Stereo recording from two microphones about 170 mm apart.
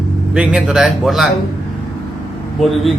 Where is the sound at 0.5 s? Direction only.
5° right (ahead or behind).